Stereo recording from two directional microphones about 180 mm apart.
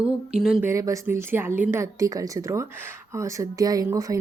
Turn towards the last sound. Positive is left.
turn(degrees=-20)  # may be behind; listen again after turning